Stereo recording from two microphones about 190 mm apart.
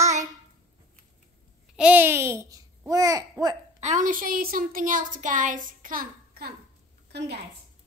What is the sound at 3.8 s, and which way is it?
A woman's voice, 40° right (ahead or behind).